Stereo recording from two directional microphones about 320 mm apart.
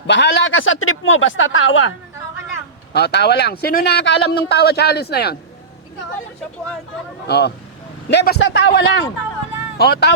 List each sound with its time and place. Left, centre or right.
0.1 s speech: left
2.9 s speech: left
7.3 s speech: left